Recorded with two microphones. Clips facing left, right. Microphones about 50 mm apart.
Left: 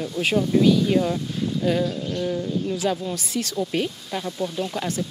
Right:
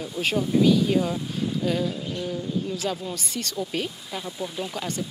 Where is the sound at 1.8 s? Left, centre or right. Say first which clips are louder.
Left 3 dB; centre.